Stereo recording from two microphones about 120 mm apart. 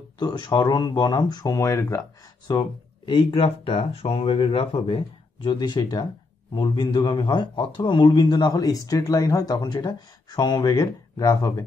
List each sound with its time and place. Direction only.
0.2 s a man's voice: 35° left (ahead or behind)
2.5 s a man's voice: 35° left (ahead or behind)